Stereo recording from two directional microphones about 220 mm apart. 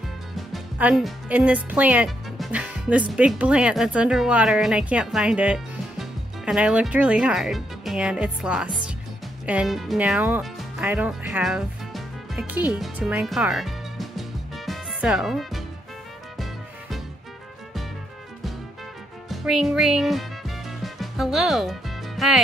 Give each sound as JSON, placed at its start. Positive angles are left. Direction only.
{"t": 0.5, "sound": "speech", "side_deg": -5}
{"t": 19.2, "sound": "music", "side_deg": 0}